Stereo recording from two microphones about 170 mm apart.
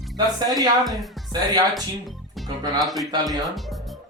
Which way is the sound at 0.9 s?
Centre (ahead or behind).